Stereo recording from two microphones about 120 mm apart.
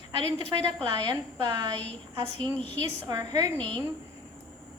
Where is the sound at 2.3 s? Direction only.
45° right (ahead or behind).